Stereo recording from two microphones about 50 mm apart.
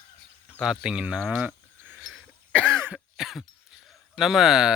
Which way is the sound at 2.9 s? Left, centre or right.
Centre.